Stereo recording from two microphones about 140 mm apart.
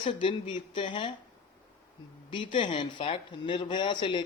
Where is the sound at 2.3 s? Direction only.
35° left (ahead or behind).